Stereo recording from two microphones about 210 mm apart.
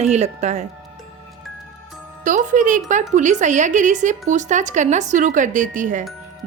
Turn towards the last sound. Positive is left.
turn(degrees=-35)  # may be behind; listen again after turning